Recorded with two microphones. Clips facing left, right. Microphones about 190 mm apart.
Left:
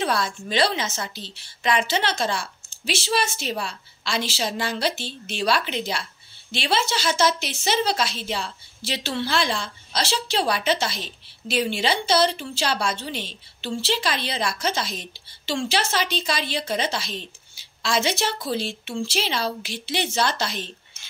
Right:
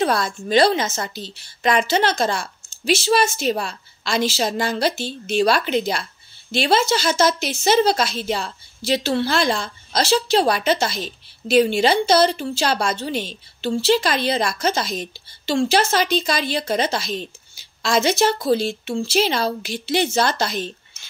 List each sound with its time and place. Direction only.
0.0 s speech: 45° right (ahead or behind)